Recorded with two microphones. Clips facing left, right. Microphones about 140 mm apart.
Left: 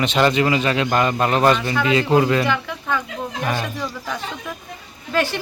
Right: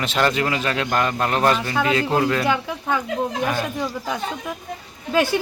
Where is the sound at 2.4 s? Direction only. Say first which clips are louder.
Right 1 dB; 15° right (ahead or behind).